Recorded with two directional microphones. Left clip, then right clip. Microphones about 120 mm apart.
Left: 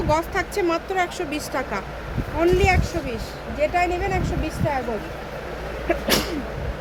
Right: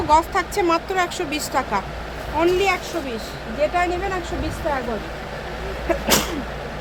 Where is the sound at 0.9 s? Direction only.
25° right (ahead or behind).